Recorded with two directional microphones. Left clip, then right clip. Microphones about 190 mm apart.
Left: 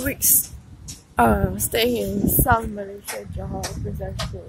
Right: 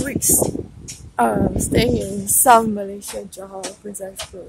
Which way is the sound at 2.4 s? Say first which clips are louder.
Right 9 dB; 40° right (ahead or behind).